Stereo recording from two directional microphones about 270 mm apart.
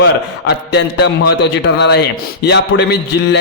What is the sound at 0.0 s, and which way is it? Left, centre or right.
A man's voice, left.